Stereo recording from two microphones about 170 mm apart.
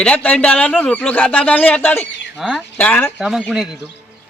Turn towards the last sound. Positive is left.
turn(degrees=-5)  # may be behind; listen again after turning